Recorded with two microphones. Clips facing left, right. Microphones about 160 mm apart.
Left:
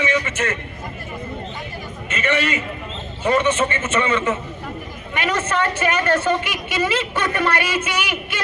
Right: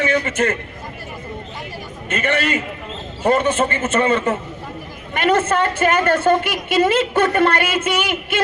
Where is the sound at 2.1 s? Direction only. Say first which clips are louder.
Right 2 dB; 50° right (ahead or behind).